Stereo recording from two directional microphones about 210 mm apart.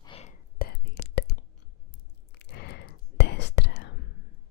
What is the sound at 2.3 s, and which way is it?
Whispering, 50° left (ahead or behind).